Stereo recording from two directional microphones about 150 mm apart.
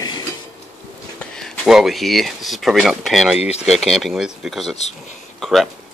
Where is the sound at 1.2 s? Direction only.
5° left (ahead or behind).